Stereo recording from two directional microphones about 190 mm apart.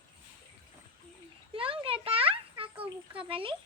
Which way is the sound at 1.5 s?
30° right (ahead or behind).